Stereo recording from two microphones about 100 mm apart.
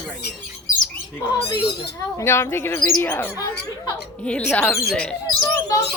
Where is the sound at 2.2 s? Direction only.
25° left (ahead or behind).